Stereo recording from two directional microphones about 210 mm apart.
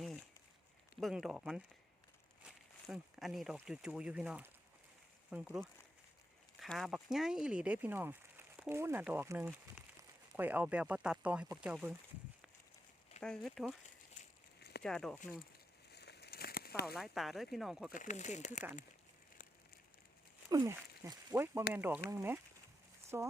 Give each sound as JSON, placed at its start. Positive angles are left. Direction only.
{"t": 0.9, "sound": "speech", "side_deg": 0}
{"t": 13.1, "sound": "speech", "side_deg": 0}
{"t": 14.2, "sound": "a sound", "side_deg": 50}
{"t": 14.8, "sound": "speech", "side_deg": 5}
{"t": 15.9, "sound": "a sound", "side_deg": 50}
{"t": 16.8, "sound": "speech", "side_deg": 0}
{"t": 17.9, "sound": "speech", "side_deg": 35}
{"t": 20.5, "sound": "speech", "side_deg": -20}